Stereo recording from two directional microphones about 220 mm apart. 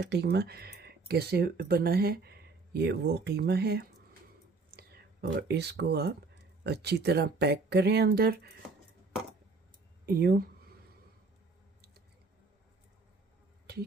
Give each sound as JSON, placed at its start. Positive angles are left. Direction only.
{"t": 0.0, "sound": "speech", "side_deg": -50}
{"t": 10.1, "sound": "speech", "side_deg": -45}
{"t": 13.7, "sound": "a sound", "side_deg": -45}